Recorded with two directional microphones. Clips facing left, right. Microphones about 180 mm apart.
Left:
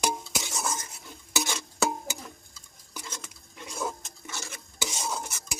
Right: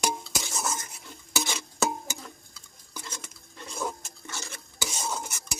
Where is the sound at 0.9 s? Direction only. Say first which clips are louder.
Even; 15° left (ahead or behind).